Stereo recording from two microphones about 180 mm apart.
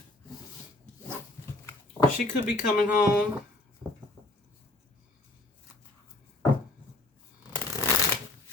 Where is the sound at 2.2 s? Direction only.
45° left (ahead or behind).